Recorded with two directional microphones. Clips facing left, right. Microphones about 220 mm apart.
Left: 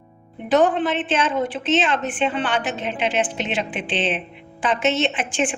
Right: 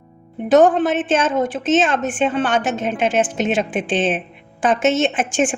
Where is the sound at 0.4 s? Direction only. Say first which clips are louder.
Right 5 dB; 45° right (ahead or behind).